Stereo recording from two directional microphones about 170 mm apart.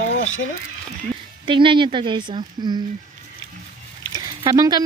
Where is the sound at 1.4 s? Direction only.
30° right (ahead or behind).